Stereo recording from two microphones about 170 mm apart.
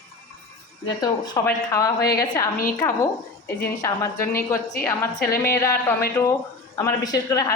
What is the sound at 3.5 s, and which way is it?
Speech, 15° left (ahead or behind).